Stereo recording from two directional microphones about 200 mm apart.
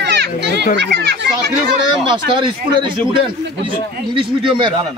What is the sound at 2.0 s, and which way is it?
Speech, 25° right (ahead or behind).